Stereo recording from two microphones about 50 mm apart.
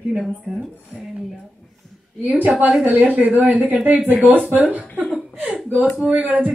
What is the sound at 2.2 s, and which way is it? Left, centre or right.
A woman's voice, right.